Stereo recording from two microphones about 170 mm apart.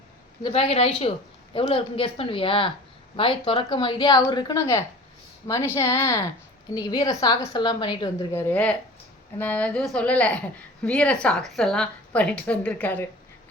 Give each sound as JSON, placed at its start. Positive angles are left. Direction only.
{"t": 0.5, "sound": "a woman's voice", "side_deg": 35}
{"t": 8.3, "sound": "a woman's voice", "side_deg": 10}